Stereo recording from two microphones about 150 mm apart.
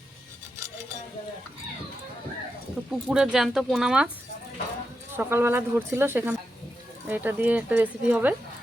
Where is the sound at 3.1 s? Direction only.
5° right (ahead or behind).